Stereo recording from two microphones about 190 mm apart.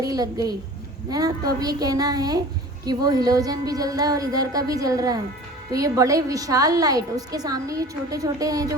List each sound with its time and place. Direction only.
0.0 s a woman's voice: 20° right (ahead or behind)
1.5 s a woman's voice: 20° right (ahead or behind)